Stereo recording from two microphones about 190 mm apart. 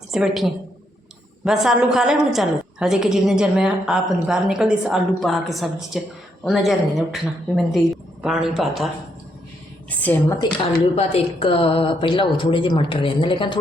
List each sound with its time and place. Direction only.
0.1 s a woman's voice: centre (ahead or behind)
10.0 s a woman's voice: 10° left (ahead or behind)
10.9 s a woman's voice: 30° left (ahead or behind)